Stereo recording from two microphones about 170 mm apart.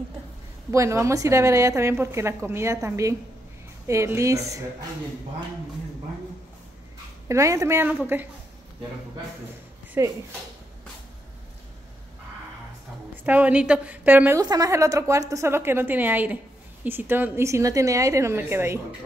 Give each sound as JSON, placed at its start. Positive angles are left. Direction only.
{"t": 0.7, "sound": "a woman's voice", "side_deg": -15}
{"t": 7.2, "sound": "a woman's voice", "side_deg": -15}
{"t": 10.0, "sound": "a woman's voice", "side_deg": -15}
{"t": 13.1, "sound": "a woman's voice", "side_deg": -10}
{"t": 14.4, "sound": "a woman's voice", "side_deg": -20}